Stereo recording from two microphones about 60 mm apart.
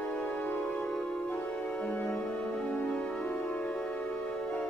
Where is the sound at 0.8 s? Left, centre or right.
Centre.